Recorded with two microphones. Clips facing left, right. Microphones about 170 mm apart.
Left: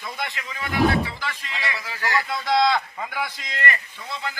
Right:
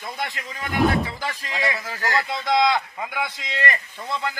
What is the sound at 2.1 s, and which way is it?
A man's voice, 20° right (ahead or behind).